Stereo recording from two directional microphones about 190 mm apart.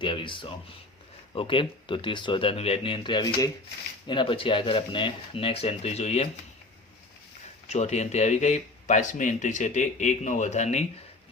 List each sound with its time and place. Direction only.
0.0 s speech: 25° left (ahead or behind)
7.7 s speech: 35° left (ahead or behind)